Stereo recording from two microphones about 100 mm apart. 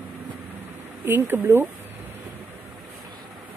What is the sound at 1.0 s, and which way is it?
Speech, 20° right (ahead or behind).